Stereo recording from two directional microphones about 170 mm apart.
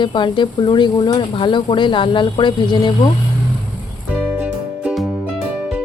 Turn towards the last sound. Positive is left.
turn(degrees=-5)  # may be behind; listen again after turning